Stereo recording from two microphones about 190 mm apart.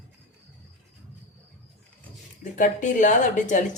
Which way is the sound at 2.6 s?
40° left (ahead or behind).